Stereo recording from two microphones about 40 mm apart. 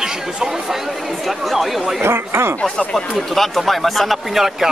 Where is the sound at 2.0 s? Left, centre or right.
Right.